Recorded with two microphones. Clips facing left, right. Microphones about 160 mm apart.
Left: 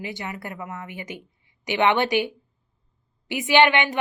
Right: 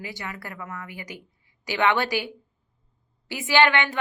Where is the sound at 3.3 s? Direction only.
20° left (ahead or behind).